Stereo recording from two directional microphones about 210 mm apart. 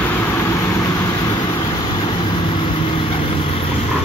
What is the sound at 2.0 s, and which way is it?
Vehicle, 20° left (ahead or behind).